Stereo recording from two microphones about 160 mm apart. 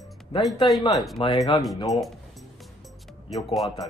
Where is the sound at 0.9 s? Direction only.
Centre (ahead or behind).